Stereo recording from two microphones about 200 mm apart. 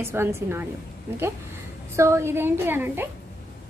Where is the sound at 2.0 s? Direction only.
15° right (ahead or behind).